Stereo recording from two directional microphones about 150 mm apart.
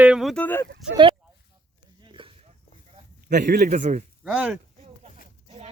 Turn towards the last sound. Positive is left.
turn(degrees=-40)  # may be behind; listen again after turning